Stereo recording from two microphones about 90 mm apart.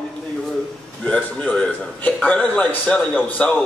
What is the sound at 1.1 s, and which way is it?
A man's voice, 10° left (ahead or behind).